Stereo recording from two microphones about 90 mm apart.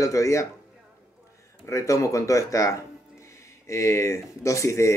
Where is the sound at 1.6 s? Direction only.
35° left (ahead or behind).